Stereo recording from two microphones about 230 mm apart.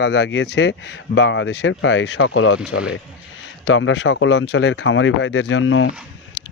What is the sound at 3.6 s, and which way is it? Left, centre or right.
Speech, left.